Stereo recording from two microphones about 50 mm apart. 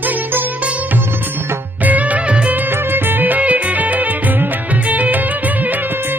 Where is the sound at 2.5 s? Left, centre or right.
Right.